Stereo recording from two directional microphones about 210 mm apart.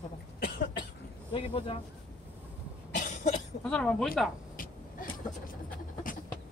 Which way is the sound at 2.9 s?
35° left (ahead or behind).